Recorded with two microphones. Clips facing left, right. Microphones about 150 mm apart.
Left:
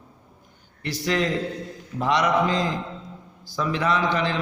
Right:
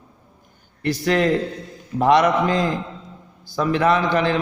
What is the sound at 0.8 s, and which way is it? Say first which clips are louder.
A man's voice: right 5 dB; 55° right (ahead or behind).